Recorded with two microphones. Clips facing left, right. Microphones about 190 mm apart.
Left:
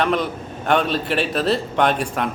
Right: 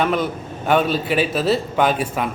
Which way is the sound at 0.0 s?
5° right (ahead or behind).